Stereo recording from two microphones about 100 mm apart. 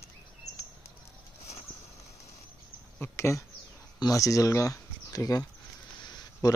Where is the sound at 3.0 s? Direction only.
30° left (ahead or behind).